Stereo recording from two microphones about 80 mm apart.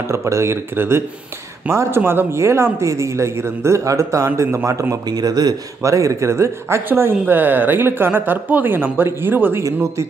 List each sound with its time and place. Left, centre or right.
0.1 s a man's voice: right
5.1 s speech: right
5.8 s speech: right